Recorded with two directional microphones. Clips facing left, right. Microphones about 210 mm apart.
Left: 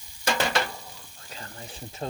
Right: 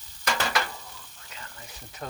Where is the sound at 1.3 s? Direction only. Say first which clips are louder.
Left 5 dB; 35° left (ahead or behind).